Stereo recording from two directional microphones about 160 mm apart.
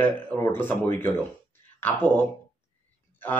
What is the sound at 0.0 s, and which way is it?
Speech, 10° left (ahead or behind).